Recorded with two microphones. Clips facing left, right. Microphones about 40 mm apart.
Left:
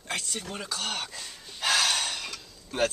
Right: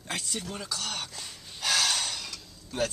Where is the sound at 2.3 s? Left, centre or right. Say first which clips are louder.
Left 2 dB; left.